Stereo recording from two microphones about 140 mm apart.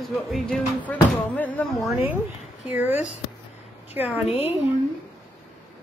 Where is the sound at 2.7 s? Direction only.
15° right (ahead or behind).